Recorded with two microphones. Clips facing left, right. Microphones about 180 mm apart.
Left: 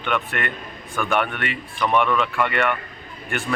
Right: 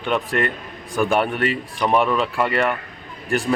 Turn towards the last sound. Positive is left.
turn(degrees=-35)  # may be behind; listen again after turning